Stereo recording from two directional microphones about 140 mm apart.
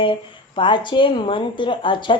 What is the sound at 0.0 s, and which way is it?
Speech, 35° left (ahead or behind).